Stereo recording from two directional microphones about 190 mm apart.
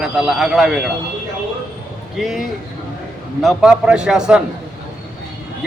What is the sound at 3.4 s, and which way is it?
Speech, 5° right (ahead or behind).